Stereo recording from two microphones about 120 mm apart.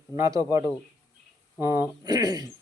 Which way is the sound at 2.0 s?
35° right (ahead or behind).